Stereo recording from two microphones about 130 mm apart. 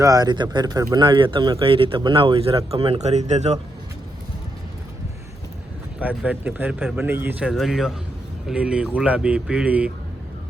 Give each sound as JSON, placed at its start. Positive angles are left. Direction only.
{"t": 0.0, "sound": "speech", "side_deg": -30}
{"t": 1.0, "sound": "speech", "side_deg": -40}
{"t": 6.0, "sound": "speech", "side_deg": -10}